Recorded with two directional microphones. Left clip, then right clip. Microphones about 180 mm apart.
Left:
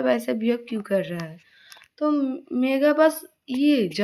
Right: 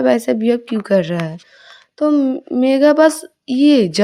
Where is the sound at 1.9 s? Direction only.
50° right (ahead or behind).